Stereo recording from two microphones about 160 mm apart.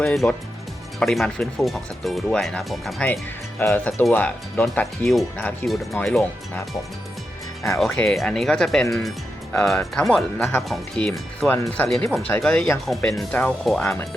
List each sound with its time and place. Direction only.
0.0 s speech: 5° left (ahead or behind)
3.6 s speech: 15° left (ahead or behind)
7.8 s speech: 5° left (ahead or behind)
11.4 s speech: 15° left (ahead or behind)